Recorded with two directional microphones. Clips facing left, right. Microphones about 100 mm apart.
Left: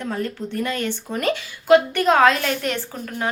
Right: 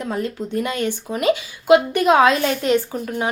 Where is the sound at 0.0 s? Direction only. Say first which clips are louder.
Right 2 dB; 15° right (ahead or behind).